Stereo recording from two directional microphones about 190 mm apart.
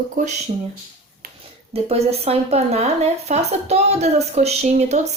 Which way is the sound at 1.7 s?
30° right (ahead or behind).